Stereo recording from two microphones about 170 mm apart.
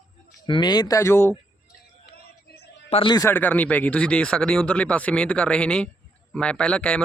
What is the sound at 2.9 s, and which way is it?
Speech, 30° left (ahead or behind).